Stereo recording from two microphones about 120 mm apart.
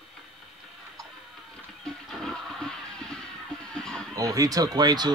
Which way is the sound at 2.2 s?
5° left (ahead or behind).